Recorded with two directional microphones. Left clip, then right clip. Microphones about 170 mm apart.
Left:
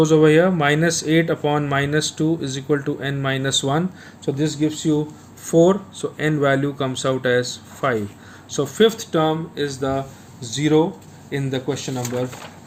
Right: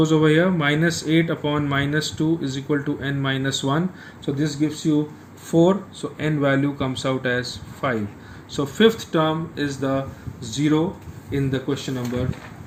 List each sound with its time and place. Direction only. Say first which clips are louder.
0.0 s speech: left 4 dB; 45° left (ahead or behind)
5.5 s speech: left 3 dB; 45° left (ahead or behind)
10.4 s speech: left 4 dB; 55° left (ahead or behind)